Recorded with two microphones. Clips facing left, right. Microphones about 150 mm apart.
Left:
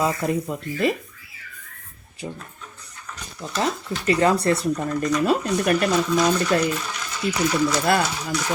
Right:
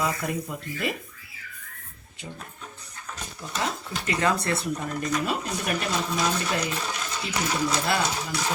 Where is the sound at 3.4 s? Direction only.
25° left (ahead or behind).